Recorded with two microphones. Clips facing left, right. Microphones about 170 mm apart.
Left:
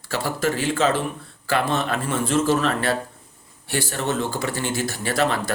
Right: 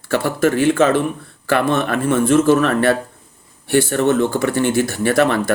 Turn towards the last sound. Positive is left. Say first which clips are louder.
# right 7 dB
turn(degrees=-60)  # may be behind; listen again after turning